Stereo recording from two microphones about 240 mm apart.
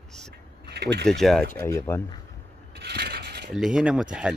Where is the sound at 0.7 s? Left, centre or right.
Right.